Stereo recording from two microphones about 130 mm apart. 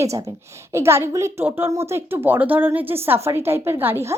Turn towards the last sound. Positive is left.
turn(degrees=-15)  # may be behind; listen again after turning